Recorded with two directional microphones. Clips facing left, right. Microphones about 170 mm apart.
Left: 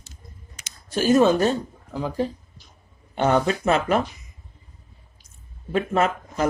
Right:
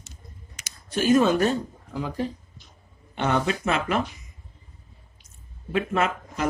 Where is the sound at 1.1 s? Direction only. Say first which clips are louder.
Left 2 dB; 30° left (ahead or behind).